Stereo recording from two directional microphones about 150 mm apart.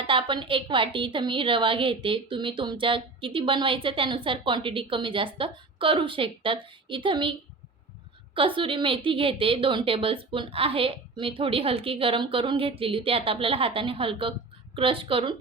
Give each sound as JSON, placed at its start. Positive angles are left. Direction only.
{"t": 0.1, "sound": "a woman's voice", "side_deg": -35}
{"t": 8.4, "sound": "a woman's voice", "side_deg": -35}